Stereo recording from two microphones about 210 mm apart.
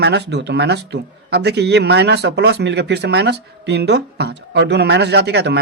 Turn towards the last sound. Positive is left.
turn(degrees=-55)  # may be behind; listen again after turning